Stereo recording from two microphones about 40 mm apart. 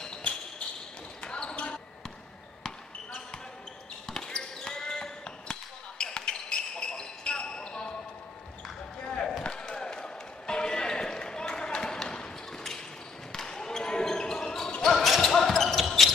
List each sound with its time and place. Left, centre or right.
1.2 s basketball bounce: left
4.1 s basketball bounce: centre
9.0 s chop: centre
9.5 s a sound: centre
13.3 s basketball bounce: centre